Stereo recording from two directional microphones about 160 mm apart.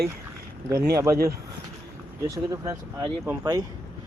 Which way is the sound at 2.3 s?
20° right (ahead or behind).